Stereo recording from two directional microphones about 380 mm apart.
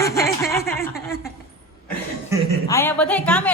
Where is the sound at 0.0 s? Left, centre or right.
Centre.